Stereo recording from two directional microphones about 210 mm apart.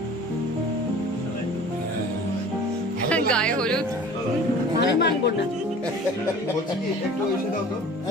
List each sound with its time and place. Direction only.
3.1 s speech: 5° left (ahead or behind)
4.7 s speech: 50° left (ahead or behind)